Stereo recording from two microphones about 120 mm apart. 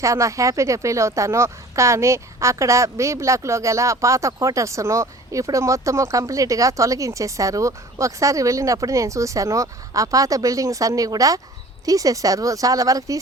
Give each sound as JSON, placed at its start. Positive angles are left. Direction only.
{"t": 0.0, "sound": "speech", "side_deg": -25}